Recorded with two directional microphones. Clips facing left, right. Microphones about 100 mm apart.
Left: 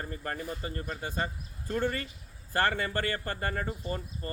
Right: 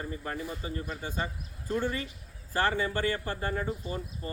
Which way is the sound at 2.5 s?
55° left (ahead or behind).